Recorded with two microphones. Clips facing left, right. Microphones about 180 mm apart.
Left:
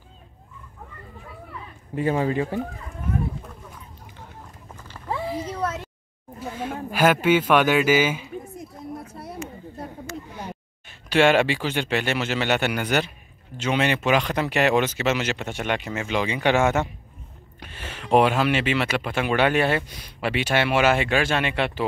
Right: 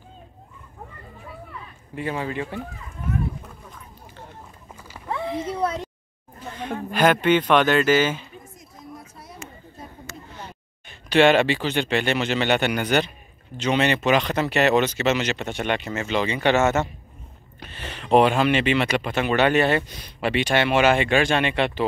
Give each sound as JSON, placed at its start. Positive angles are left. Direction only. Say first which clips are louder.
{"t": 2.0, "sound": "speech", "louder": "left 5 dB", "side_deg": 40}
{"t": 6.4, "sound": "speech", "louder": "even", "side_deg": 5}
{"t": 8.5, "sound": "a sound", "louder": "left 6 dB", "side_deg": 60}
{"t": 10.3, "sound": "speech", "louder": "left 4 dB", "side_deg": 10}